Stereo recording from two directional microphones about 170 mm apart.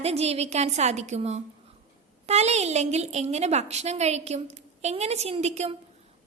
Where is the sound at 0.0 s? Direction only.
40° right (ahead or behind).